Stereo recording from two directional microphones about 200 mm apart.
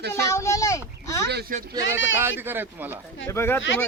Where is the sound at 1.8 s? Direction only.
70° left (ahead or behind).